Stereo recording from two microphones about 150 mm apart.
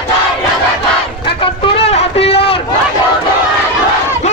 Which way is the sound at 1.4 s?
35° left (ahead or behind).